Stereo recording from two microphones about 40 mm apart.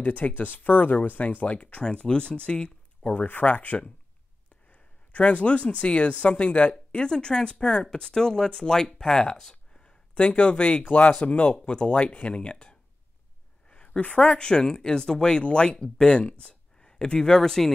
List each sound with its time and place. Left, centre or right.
0.0 s speech: left
0.4 s speech: left
1.9 s speech: left
3.3 s speech: left
10.9 s speech: left
11.1 s speech: left
13.8 s speech: left
16.8 s speech: centre